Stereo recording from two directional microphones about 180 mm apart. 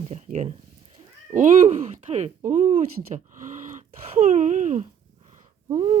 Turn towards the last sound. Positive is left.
turn(degrees=-35)  # may be behind; listen again after turning